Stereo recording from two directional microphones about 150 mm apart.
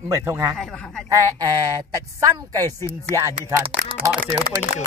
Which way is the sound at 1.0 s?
20° right (ahead or behind).